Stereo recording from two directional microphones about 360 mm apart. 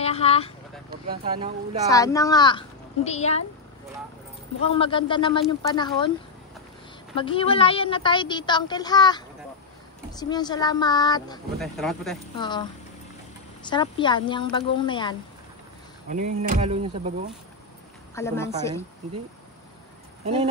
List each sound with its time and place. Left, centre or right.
0.0 s a sound: centre
0.8 s a sound: right
1.9 s a woman's voice: centre
4.6 s a woman's voice: centre
7.2 s a woman's voice: centre
11.6 s speech: centre
12.4 s a woman's voice: centre
13.7 s a woman's voice: centre
16.1 s a sound: centre
18.1 s a woman's voice: centre